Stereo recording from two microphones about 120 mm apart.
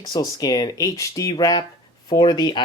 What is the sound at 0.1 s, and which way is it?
Speech, 30° left (ahead or behind).